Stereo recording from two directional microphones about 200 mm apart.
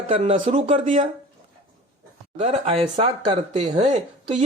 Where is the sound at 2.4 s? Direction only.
35° right (ahead or behind).